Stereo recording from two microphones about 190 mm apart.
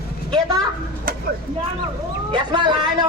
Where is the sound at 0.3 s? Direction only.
20° right (ahead or behind).